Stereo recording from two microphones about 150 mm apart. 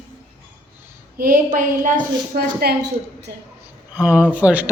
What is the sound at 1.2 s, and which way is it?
A woman's voice, 65° right (ahead or behind).